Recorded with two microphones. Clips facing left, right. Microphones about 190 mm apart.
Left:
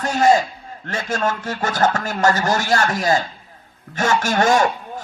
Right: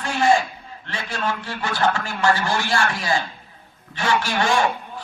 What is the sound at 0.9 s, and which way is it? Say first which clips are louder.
Speech: left 5 dB; 45° left (ahead or behind).